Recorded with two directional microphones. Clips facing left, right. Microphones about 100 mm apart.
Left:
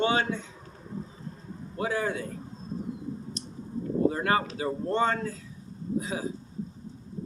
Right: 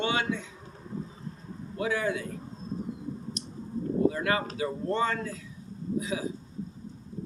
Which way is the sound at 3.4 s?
35° left (ahead or behind).